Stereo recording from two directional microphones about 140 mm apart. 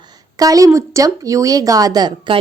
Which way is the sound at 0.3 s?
25° right (ahead or behind).